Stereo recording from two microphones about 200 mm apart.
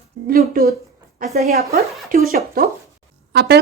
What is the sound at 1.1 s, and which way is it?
Speech, 35° right (ahead or behind).